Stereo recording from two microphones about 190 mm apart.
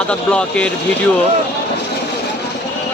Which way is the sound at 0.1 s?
5° left (ahead or behind).